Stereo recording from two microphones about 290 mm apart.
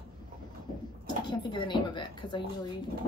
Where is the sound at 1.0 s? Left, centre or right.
Centre.